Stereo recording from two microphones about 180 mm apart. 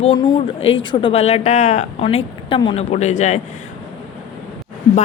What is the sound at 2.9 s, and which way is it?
Speech, 40° left (ahead or behind).